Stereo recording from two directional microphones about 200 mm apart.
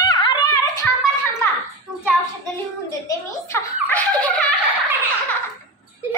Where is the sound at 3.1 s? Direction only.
10° left (ahead or behind).